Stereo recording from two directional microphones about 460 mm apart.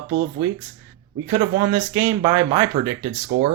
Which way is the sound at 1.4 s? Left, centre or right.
Centre.